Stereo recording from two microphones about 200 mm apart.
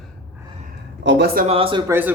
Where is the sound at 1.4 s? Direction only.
30° right (ahead or behind).